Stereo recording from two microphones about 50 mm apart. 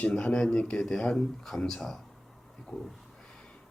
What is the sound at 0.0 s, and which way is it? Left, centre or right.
A man's voice, left.